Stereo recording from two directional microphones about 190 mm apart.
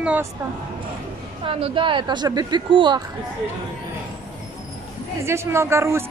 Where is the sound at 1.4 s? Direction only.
30° right (ahead or behind).